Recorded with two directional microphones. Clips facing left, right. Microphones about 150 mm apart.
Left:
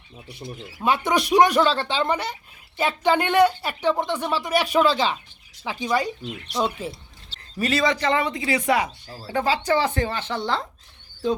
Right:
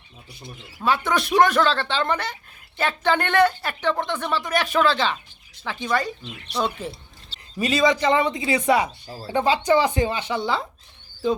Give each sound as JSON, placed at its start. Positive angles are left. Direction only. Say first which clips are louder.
{"t": 0.8, "sound": "speech", "louder": "left 1 dB", "side_deg": 20}
{"t": 7.6, "sound": "speech", "louder": "right 2 dB", "side_deg": -15}